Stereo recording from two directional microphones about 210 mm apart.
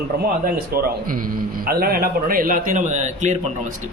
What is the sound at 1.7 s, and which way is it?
Speech, 45° right (ahead or behind).